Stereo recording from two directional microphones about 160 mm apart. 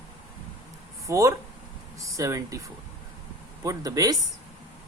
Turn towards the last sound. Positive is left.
turn(degrees=-25)  # may be behind; listen again after turning